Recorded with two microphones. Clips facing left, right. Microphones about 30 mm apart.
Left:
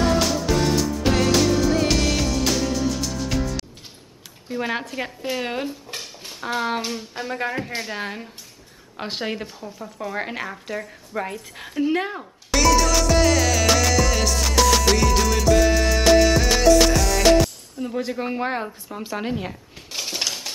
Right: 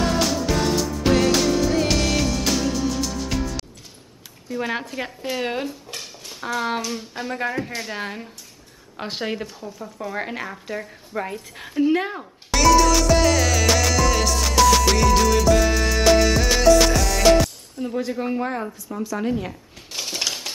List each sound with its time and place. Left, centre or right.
0.0 s music: centre
4.6 s a woman's voice: centre
11.5 s music: centre
18.0 s a woman's voice: centre
18.4 s speech: left
19.3 s a sound: centre
20.0 s typewriter: centre